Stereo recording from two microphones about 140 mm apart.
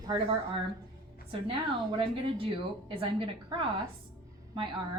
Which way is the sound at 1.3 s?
40° right (ahead or behind).